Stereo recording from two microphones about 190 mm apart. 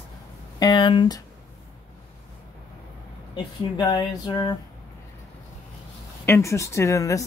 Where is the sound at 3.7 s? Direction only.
20° left (ahead or behind).